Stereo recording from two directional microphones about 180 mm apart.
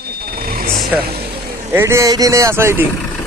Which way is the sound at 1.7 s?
15° right (ahead or behind).